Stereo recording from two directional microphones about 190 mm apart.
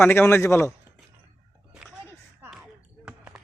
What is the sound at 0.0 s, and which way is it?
Speech, 10° left (ahead or behind).